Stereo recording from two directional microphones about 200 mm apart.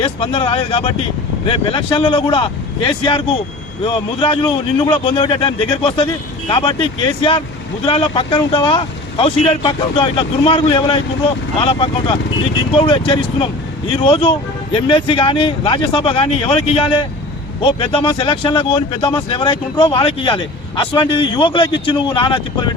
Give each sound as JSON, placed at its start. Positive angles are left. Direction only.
{"t": 0.0, "sound": "speech", "side_deg": 25}
{"t": 7.9, "sound": "speech", "side_deg": 25}